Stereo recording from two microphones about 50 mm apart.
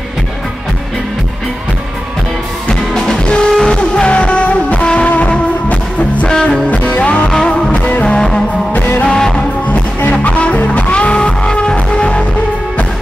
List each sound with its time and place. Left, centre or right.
2.7 s music: centre
6.2 s music: centre
6.7 s music: left
10.2 s music: left